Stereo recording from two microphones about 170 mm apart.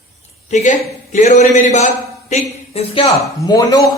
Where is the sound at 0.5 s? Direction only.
45° left (ahead or behind).